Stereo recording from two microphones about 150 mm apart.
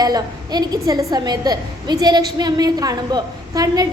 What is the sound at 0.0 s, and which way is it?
A woman's voice, 25° right (ahead or behind).